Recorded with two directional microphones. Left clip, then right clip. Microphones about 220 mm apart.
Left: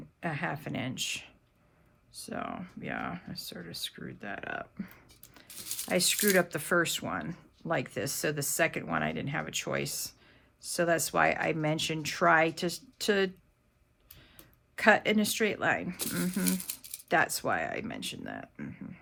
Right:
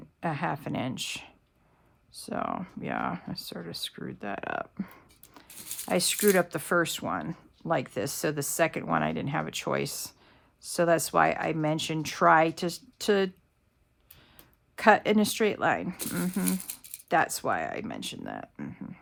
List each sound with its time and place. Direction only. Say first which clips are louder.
0.2 s speech: right 4 dB; 15° right (ahead or behind)
5.5 s a sound: left 1 dB; centre (ahead or behind)
5.9 s speech: right 2 dB; 15° right (ahead or behind)
14.8 s speech: right 3 dB; 15° right (ahead or behind)
16.0 s speech: right 1 dB; centre (ahead or behind)
17.1 s speech: right 2 dB; 10° right (ahead or behind)